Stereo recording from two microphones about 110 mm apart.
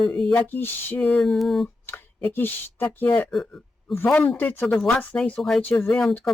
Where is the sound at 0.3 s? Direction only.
15° left (ahead or behind).